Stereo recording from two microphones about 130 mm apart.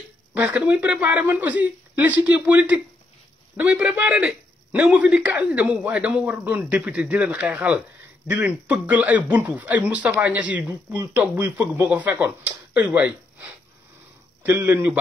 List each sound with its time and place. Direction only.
0.3 s a man's voice: 10° right (ahead or behind)